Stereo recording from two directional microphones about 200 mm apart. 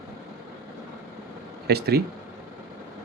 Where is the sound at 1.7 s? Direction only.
55° right (ahead or behind).